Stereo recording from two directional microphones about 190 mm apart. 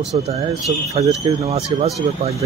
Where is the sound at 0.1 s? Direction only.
30° right (ahead or behind).